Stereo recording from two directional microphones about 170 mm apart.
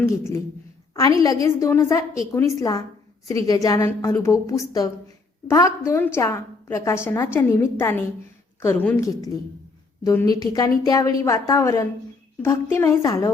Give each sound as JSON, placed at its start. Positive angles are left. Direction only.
{"t": 0.9, "sound": "a woman's voice", "side_deg": 20}